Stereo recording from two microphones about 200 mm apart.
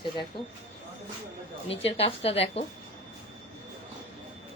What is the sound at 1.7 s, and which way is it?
Speech, 30° left (ahead or behind).